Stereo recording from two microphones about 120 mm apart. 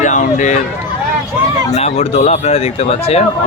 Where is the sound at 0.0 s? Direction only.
90° left.